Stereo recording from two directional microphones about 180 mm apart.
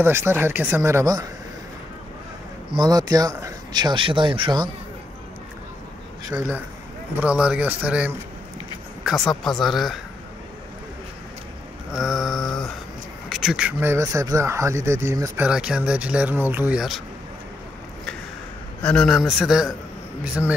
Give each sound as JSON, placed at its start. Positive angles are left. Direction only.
{"t": 0.0, "sound": "speech", "side_deg": -15}
{"t": 2.7, "sound": "speech", "side_deg": -20}
{"t": 6.3, "sound": "speech", "side_deg": -10}
{"t": 9.6, "sound": "a man's voice", "side_deg": 0}
{"t": 11.9, "sound": "a man's voice", "side_deg": 0}
{"t": 15.4, "sound": "speech", "side_deg": -5}
{"t": 18.8, "sound": "a man's voice", "side_deg": 5}